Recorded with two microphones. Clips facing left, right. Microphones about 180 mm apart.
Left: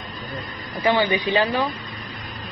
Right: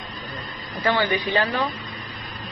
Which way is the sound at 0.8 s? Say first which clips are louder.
Left 2 dB; 15° left (ahead or behind).